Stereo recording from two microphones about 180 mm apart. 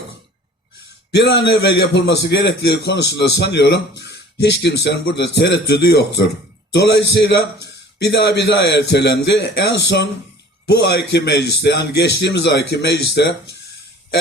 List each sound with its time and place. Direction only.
1.1 s a man's voice: 65° left (ahead or behind)